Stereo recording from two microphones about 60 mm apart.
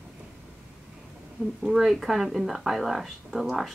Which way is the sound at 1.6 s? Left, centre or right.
Centre.